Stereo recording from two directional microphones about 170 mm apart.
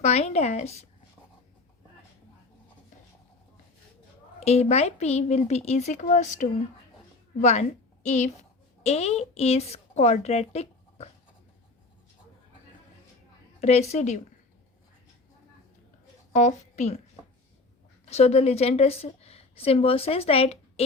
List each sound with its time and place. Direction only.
0.0 s a woman's voice: 40° left (ahead or behind)
4.4 s a woman's voice: 40° left (ahead or behind)
13.6 s a woman's voice: 40° left (ahead or behind)
16.3 s a woman's voice: 45° left (ahead or behind)
18.0 s a woman's voice: 40° left (ahead or behind)